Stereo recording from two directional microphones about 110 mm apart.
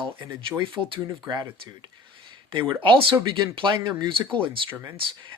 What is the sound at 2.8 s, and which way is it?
Speech, 50° right (ahead or behind).